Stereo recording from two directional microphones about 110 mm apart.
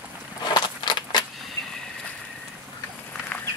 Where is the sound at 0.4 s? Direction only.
40° left (ahead or behind).